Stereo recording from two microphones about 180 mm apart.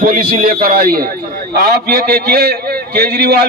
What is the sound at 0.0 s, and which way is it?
A man's voice, 55° right (ahead or behind).